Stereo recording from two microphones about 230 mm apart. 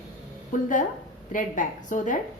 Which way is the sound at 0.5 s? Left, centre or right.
Left.